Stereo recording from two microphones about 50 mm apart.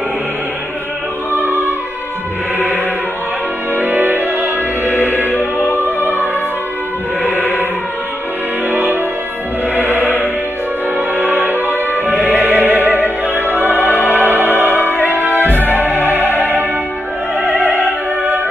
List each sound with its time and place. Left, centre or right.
1.4 s opera: right
3.7 s music: right
4.9 s music: left
8.6 s music: right
11.0 s music: right
11.7 s music: left
12.3 s music: right
13.6 s opera: right
14.0 s music: right
15.6 s music: left
17.6 s opera: right